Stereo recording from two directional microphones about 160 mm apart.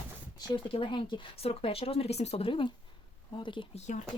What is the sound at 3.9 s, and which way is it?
Speech, 50° left (ahead or behind).